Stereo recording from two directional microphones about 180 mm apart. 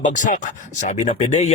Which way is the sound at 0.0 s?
45° left (ahead or behind).